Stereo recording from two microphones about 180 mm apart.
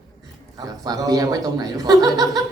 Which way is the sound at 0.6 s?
20° right (ahead or behind).